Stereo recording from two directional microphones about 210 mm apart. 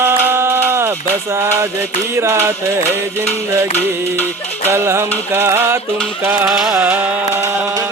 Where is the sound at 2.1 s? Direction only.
10° right (ahead or behind).